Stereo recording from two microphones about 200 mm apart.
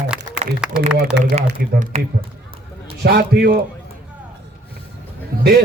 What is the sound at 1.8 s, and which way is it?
Speech, 40° right (ahead or behind).